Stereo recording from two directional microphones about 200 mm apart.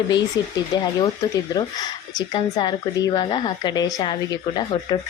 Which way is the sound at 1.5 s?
20° left (ahead or behind).